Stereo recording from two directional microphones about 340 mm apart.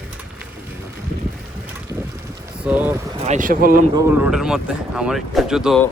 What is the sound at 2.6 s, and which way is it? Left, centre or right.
Speech, centre.